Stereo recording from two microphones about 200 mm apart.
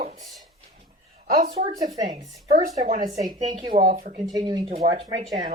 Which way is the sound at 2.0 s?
25° right (ahead or behind).